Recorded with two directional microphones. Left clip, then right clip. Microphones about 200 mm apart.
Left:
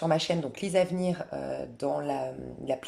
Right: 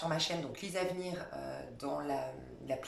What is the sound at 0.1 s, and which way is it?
Speech, 45° left (ahead or behind).